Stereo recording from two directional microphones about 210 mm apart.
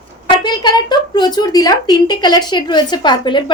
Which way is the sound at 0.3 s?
20° left (ahead or behind).